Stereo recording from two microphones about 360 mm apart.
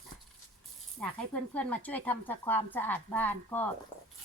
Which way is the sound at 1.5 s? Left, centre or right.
Centre.